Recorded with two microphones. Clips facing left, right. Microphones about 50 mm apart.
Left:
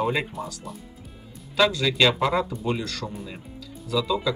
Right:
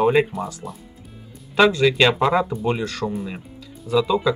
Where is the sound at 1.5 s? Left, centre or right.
Right.